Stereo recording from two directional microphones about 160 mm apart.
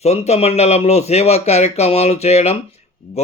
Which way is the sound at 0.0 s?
40° left (ahead or behind).